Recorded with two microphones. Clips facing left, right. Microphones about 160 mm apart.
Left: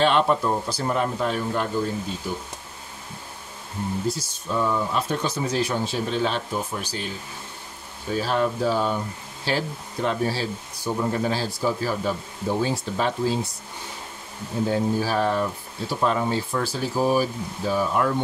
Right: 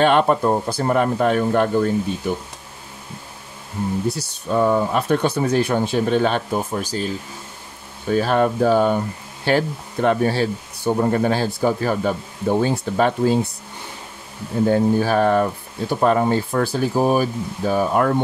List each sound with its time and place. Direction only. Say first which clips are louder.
0.0 s speech: right 4 dB; 50° right (ahead or behind)
4.1 s speech: right 5 dB; 65° right (ahead or behind); by 7.1 s 45° right (ahead or behind)
8.1 s speech: right 6 dB; 55° right (ahead or behind)
14.7 s speech: right 6 dB; 55° right (ahead or behind)